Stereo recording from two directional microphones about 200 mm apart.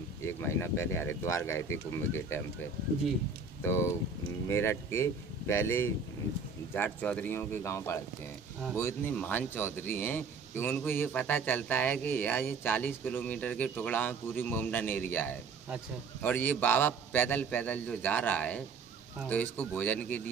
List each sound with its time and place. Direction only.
0.2 s speech: 10° left (ahead or behind)
3.6 s speech: 15° left (ahead or behind)